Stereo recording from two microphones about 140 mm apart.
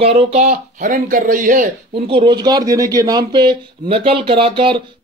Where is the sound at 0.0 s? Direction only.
50° right (ahead or behind); by 1.7 s 70° right (ahead or behind).